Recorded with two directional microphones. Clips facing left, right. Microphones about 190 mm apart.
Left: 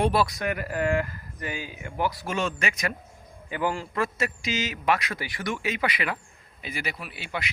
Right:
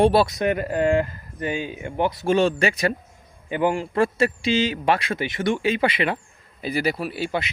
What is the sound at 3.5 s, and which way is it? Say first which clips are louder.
Speech: right 6 dB; 20° right (ahead or behind).